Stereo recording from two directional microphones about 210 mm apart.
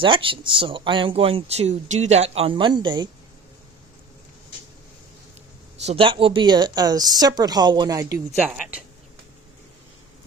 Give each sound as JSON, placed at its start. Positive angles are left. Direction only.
{"t": 0.0, "sound": "speech", "side_deg": -25}
{"t": 5.9, "sound": "a woman's voice", "side_deg": -25}